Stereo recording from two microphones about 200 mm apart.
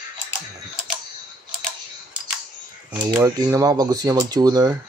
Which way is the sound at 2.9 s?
15° right (ahead or behind).